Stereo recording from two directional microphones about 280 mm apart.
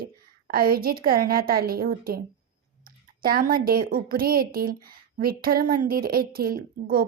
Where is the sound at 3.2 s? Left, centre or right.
Right.